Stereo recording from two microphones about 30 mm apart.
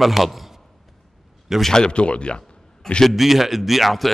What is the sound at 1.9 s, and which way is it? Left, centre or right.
Speech, left.